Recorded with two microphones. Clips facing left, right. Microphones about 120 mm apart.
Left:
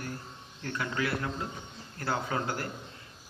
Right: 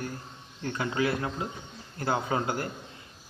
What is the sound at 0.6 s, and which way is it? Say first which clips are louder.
Speech: right 4 dB; 25° right (ahead or behind).